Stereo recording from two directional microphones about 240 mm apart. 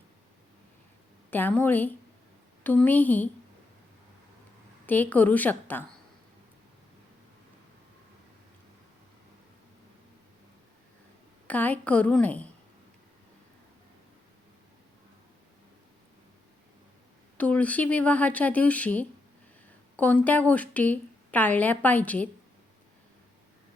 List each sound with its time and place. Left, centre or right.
1.3 s a woman's voice: centre
4.9 s a woman's voice: centre
11.4 s a woman's voice: centre
17.3 s a woman's voice: centre